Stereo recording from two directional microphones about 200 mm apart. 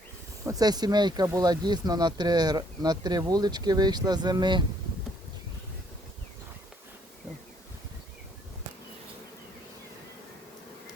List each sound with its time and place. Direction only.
0.4 s speech: 20° right (ahead or behind)